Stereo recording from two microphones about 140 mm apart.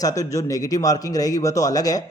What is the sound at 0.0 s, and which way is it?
Speech, 25° left (ahead or behind).